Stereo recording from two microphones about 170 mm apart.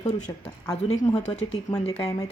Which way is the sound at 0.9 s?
35° left (ahead or behind).